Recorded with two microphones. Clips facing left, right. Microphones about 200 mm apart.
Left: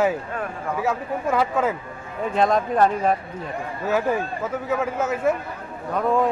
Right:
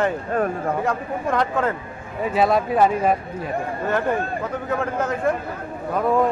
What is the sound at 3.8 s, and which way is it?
Speech, 5° left (ahead or behind).